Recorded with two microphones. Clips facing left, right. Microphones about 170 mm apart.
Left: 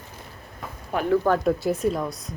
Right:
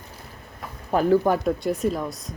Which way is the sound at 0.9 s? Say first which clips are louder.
Right 4 dB; 35° right (ahead or behind).